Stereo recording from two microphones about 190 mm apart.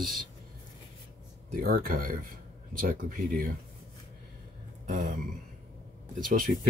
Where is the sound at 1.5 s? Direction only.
50° right (ahead or behind).